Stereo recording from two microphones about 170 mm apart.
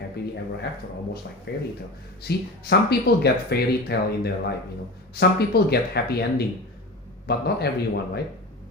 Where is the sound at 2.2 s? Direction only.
70° left (ahead or behind).